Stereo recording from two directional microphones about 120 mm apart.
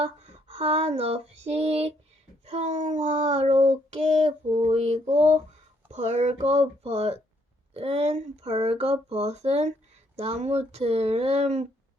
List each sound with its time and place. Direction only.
0.0 s female singing: 55° right (ahead or behind)
2.5 s child singing: 65° right (ahead or behind)
4.7 s speech: 65° right (ahead or behind)
5.0 s child singing: 75° right (ahead or behind)
5.9 s speech: 70° right (ahead or behind)